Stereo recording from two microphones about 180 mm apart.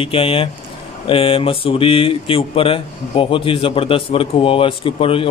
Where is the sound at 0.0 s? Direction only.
30° left (ahead or behind).